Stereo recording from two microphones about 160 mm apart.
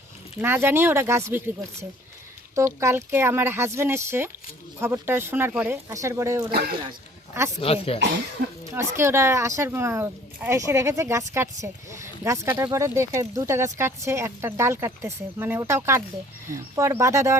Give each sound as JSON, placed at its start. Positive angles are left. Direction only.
{"t": 0.4, "sound": "speech", "side_deg": -15}
{"t": 6.5, "sound": "speech", "side_deg": -75}
{"t": 7.6, "sound": "speech", "side_deg": 35}
{"t": 8.7, "sound": "speech", "side_deg": -15}